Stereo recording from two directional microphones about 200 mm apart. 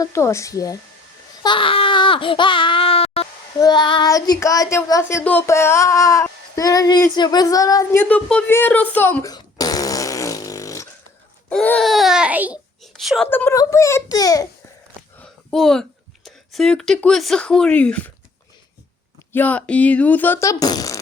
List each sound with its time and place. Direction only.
0.0 s speech: 15° left (ahead or behind)
8.0 s fart: 5° left (ahead or behind)
11.4 s babbling: 5° left (ahead or behind)
13.3 s speech: 15° left (ahead or behind)
15.2 s a woman's voice: 5° left (ahead or behind)
19.3 s speech: 10° left (ahead or behind)